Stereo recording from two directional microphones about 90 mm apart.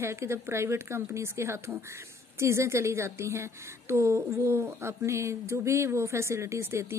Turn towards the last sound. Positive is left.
turn(degrees=-30)  # may be behind; listen again after turning